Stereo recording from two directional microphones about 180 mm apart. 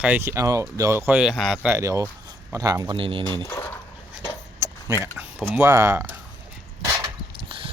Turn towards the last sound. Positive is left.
turn(degrees=-30)  # may be behind; listen again after turning